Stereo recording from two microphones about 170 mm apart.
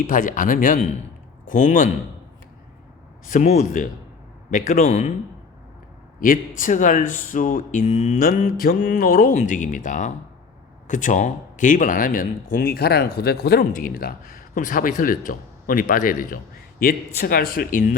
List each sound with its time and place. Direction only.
0.1 s a man's voice: 50° left (ahead or behind)
3.2 s a man's voice: 45° left (ahead or behind)
6.1 s speech: 55° left (ahead or behind)